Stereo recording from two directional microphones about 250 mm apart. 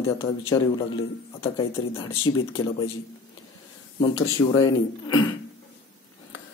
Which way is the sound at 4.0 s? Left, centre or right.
Left.